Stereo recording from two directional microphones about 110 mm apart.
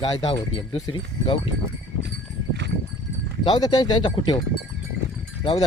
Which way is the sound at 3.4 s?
40° left (ahead or behind).